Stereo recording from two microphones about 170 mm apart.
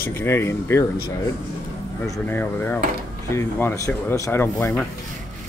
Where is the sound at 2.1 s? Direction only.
10° left (ahead or behind).